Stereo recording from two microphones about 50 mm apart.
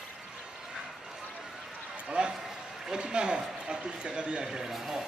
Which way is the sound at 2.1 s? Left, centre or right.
Centre.